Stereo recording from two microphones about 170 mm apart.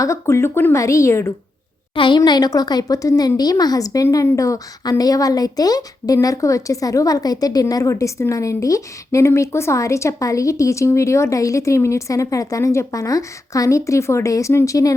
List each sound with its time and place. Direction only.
0.0 s a woman's voice: 15° left (ahead or behind)
2.0 s a woman's voice: 25° left (ahead or behind)